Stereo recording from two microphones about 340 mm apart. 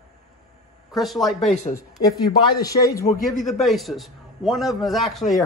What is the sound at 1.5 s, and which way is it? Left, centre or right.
A man's voice, centre.